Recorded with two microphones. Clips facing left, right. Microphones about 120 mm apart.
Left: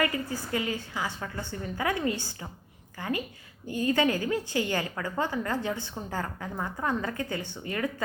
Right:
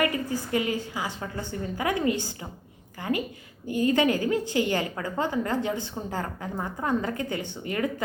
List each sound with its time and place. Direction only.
0.0 s a woman's voice: 20° right (ahead or behind)